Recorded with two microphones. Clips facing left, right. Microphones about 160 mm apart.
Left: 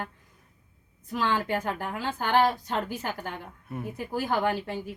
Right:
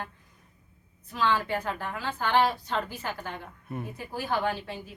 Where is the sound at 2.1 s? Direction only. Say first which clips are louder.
Left 1 dB; 45° left (ahead or behind).